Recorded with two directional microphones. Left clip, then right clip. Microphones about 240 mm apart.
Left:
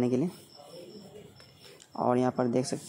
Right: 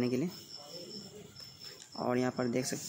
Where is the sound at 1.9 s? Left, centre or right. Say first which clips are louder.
Left 6 dB; centre.